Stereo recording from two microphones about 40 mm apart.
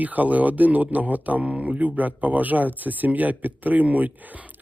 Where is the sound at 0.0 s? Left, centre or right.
Right.